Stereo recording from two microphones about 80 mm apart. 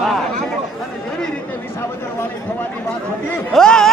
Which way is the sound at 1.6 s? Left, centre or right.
Left.